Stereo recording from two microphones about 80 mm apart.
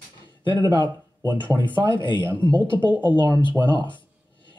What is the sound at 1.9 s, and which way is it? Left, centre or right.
Speech, left.